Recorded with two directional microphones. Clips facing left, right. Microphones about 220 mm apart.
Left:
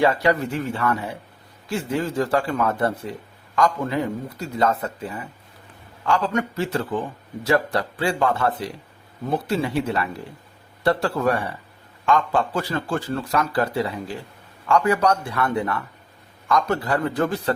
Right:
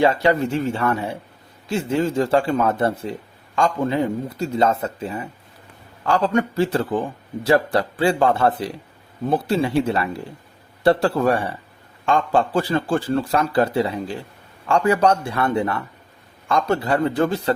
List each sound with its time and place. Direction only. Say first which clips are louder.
0.0 s a man's voice: right 2 dB; 25° right (ahead or behind)